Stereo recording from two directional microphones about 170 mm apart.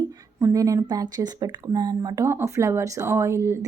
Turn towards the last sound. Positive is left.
turn(degrees=-15)  # may be behind; listen again after turning